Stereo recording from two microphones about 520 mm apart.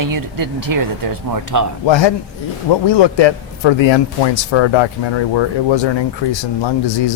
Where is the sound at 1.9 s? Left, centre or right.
Left.